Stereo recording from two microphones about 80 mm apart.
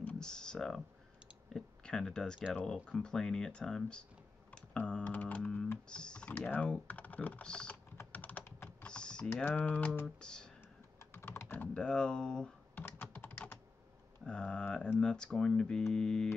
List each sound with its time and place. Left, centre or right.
0.0 s a sound: centre
1.5 s speech: centre
4.6 s computer keyboard: centre
5.9 s speech: centre
8.1 s typing: left
9.3 s speech: left
11.1 s typing: left
11.7 s speech: centre
12.7 s computer keyboard: left
14.2 s speech: centre